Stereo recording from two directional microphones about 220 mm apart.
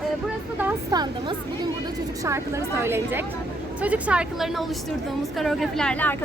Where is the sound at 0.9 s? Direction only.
20° right (ahead or behind); by 6.2 s 5° left (ahead or behind).